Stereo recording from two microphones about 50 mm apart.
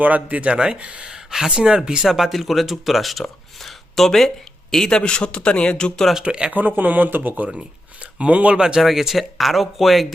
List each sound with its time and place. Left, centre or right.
0.0 s speech: right
2.0 s speech: centre
6.2 s speech: centre
6.5 s speech: right
8.8 s speech: centre